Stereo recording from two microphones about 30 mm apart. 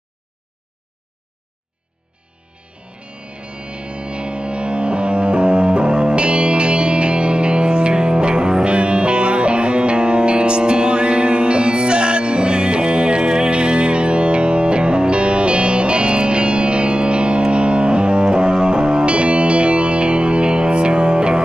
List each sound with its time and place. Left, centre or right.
3.0 s music: right